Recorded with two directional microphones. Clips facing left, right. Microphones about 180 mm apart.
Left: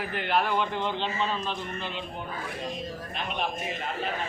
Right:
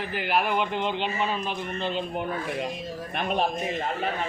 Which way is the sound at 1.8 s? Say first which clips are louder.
Right 7 dB; 35° right (ahead or behind).